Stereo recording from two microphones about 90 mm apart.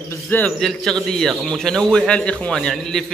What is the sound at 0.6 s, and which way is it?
A man's voice, 5° left (ahead or behind).